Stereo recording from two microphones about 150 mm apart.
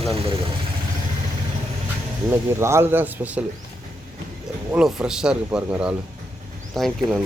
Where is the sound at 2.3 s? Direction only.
15° right (ahead or behind).